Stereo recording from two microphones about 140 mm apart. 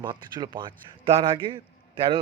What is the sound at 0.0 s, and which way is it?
Speech, 30° right (ahead or behind).